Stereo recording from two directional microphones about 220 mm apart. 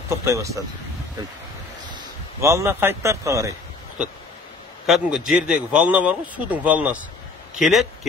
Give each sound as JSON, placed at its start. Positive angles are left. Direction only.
{"t": 0.1, "sound": "speech", "side_deg": -15}
{"t": 2.4, "sound": "speech", "side_deg": -10}
{"t": 4.8, "sound": "speech", "side_deg": 0}